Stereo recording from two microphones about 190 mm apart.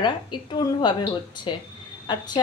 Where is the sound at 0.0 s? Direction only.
25° left (ahead or behind).